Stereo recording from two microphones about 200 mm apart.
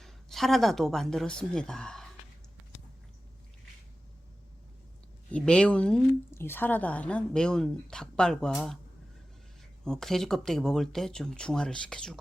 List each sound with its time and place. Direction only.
0.0 s a woman's voice: centre (ahead or behind)
5.3 s speech: 5° left (ahead or behind)
9.8 s speech: centre (ahead or behind)